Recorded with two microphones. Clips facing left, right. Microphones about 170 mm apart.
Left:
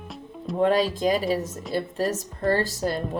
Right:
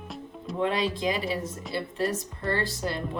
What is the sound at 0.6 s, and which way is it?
Speech, 40° left (ahead or behind).